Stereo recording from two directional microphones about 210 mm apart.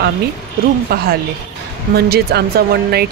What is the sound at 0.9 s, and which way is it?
Speech, 45° right (ahead or behind).